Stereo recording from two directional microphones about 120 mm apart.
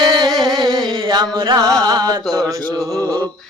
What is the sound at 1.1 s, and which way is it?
Music, 35° right (ahead or behind).